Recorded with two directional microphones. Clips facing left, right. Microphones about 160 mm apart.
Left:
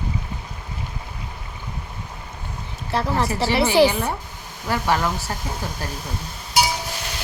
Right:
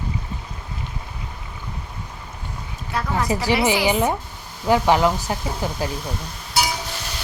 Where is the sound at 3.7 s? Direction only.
15° right (ahead or behind).